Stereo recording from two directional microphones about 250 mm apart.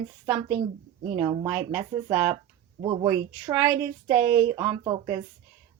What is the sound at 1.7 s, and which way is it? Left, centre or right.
Speech, centre.